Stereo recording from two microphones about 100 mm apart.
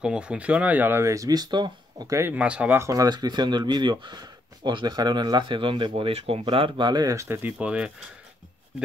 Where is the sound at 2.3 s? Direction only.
10° right (ahead or behind).